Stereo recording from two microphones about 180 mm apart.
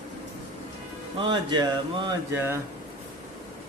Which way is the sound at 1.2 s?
25° right (ahead or behind).